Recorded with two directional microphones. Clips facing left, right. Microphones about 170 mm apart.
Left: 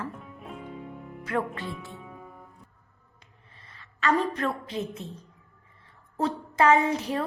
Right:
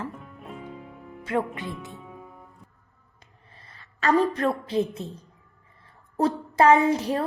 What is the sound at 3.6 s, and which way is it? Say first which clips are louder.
A woman's voice: right 2 dB; 40° right (ahead or behind).